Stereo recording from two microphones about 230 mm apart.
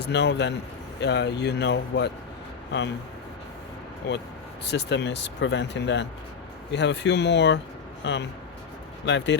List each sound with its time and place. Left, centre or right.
0.0 s speech: left
4.1 s speech: left